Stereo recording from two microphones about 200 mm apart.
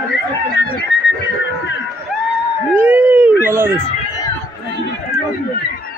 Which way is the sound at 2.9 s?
10° right (ahead or behind).